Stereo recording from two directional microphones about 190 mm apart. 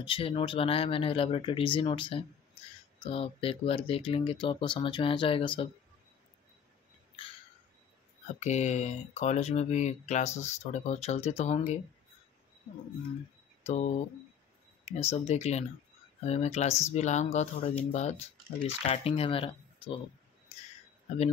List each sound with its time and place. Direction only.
0.0 s speech: 30° left (ahead or behind)
8.4 s speech: 40° left (ahead or behind)
13.7 s speech: 35° left (ahead or behind)